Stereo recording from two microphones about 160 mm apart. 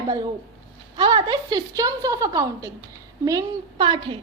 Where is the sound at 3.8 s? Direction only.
30° right (ahead or behind).